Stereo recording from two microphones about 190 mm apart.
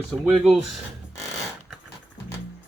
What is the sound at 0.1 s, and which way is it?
Speech, 5° left (ahead or behind).